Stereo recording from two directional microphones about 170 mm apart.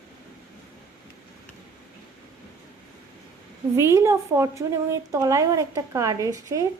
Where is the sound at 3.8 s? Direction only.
15° right (ahead or behind).